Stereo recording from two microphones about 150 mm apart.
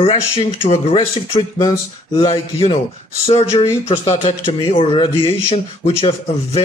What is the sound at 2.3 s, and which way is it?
Speech, 40° left (ahead or behind).